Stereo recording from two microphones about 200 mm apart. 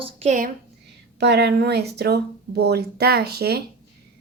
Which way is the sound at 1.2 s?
55° right (ahead or behind).